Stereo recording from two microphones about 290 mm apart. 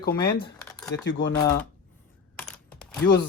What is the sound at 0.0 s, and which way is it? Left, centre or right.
Speech, left.